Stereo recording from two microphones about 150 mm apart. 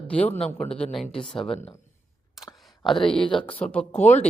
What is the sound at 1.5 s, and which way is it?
Speech, 40° left (ahead or behind).